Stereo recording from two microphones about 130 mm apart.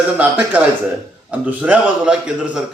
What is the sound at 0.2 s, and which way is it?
A man's voice, 10° right (ahead or behind).